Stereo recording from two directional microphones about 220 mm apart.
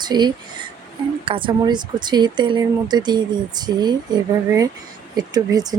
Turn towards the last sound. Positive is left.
turn(degrees=-15)  # may be behind; listen again after turning